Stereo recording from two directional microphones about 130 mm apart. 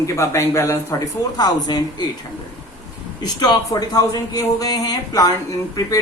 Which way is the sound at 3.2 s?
30° left (ahead or behind).